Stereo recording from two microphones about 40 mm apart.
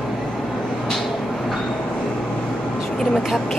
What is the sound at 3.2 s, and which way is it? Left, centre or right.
Speech, centre.